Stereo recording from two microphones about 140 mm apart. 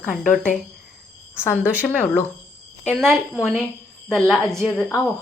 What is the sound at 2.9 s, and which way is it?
A woman's voice, 5° left (ahead or behind).